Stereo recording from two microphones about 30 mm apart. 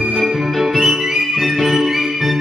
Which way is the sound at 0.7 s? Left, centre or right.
Centre.